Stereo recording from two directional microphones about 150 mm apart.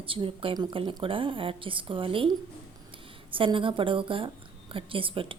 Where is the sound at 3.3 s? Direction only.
35° right (ahead or behind).